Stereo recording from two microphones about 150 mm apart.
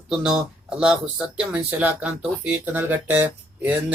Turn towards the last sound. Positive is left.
turn(degrees=-10)  # may be behind; listen again after turning